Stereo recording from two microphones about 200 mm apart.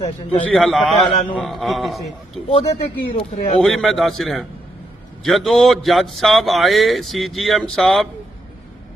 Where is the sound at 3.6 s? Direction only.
Centre (ahead or behind).